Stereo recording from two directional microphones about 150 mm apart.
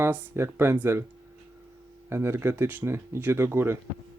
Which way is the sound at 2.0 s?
15° right (ahead or behind).